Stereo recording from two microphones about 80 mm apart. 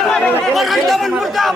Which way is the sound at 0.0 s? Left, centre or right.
Centre.